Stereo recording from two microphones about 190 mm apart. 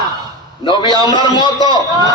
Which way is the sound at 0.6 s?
25° left (ahead or behind).